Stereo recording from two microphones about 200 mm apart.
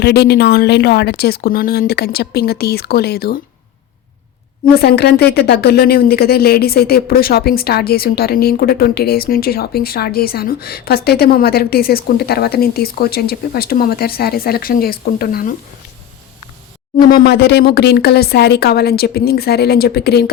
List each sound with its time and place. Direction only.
0.0 s speech: 55° left (ahead or behind)
4.8 s speech: 55° left (ahead or behind)
17.1 s speech: 50° left (ahead or behind)